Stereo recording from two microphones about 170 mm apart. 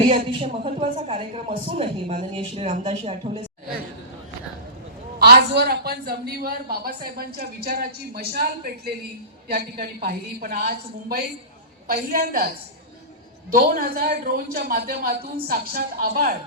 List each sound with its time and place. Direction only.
0.1 s a woman's voice: 35° right (ahead or behind)
5.2 s a woman's voice: 70° right (ahead or behind)
13.5 s a woman's voice: 60° right (ahead or behind)